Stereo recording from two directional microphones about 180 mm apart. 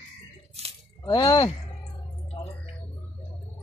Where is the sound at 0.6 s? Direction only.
35° right (ahead or behind).